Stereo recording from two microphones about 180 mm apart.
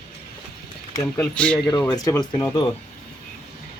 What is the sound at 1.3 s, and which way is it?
Speech, 5° left (ahead or behind).